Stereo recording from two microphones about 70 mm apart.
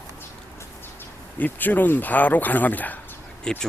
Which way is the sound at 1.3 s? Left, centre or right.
Left.